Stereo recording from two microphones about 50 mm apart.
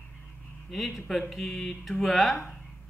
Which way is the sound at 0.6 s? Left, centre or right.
Centre.